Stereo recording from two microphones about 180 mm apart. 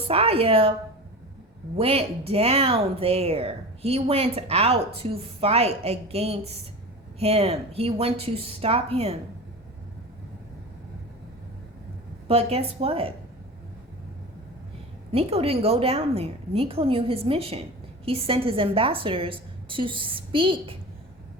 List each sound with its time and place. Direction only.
0.1 s a woman's voice: 35° right (ahead or behind)
1.7 s a woman's voice: 35° right (ahead or behind)
12.3 s a woman's voice: 35° right (ahead or behind)
15.1 s a woman's voice: 35° right (ahead or behind)